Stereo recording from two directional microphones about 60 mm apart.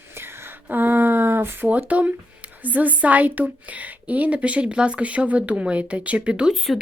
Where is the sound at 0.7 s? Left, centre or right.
Right.